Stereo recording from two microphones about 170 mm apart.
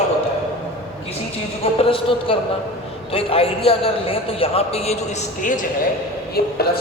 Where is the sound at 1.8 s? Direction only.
30° left (ahead or behind).